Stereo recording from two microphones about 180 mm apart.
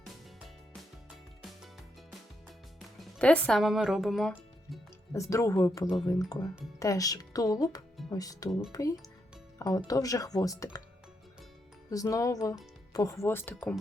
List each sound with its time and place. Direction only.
0.0 s music: centre (ahead or behind)
3.2 s speech: 5° left (ahead or behind)
5.1 s speech: 15° left (ahead or behind)
11.9 s speech: 20° left (ahead or behind)